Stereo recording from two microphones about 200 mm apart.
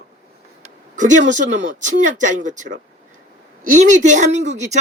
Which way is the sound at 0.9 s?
40° right (ahead or behind).